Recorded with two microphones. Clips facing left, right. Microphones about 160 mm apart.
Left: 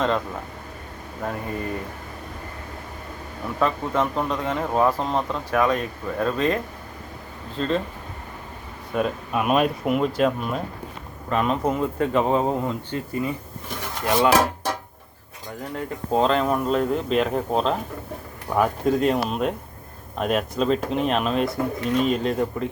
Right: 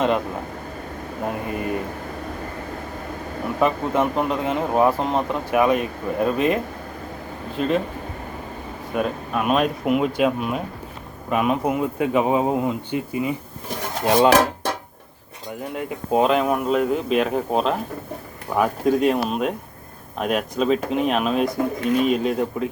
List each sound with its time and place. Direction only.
3.6 s speech: 20° right (ahead or behind)
9.0 s speech: centre (ahead or behind)
14.0 s stir: 25° right (ahead or behind)
15.7 s speech: 10° right (ahead or behind)